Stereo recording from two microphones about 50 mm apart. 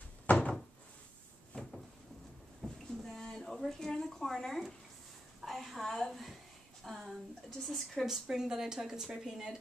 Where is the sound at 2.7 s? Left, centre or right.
Centre.